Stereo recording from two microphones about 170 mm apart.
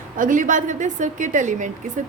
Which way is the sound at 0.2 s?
50° right (ahead or behind).